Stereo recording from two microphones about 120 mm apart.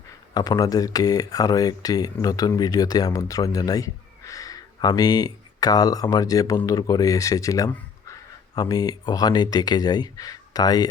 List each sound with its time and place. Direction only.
0.3 s speech: 35° left (ahead or behind)